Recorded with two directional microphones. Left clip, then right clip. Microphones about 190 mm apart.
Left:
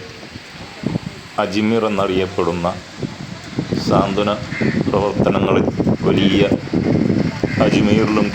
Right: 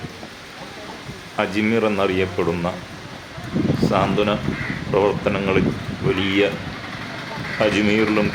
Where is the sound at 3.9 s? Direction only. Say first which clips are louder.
Left 4 dB; 15° left (ahead or behind).